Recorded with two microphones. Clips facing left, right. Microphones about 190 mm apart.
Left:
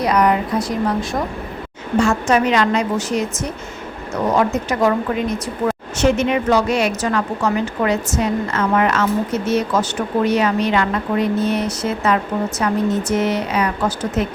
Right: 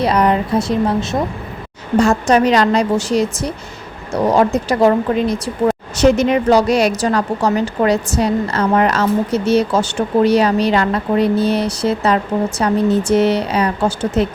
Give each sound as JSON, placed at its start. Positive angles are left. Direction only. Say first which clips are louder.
{"t": 0.0, "sound": "speech", "louder": "right 2 dB", "side_deg": -30}
{"t": 2.0, "sound": "speech", "louder": "right 3 dB", "side_deg": -35}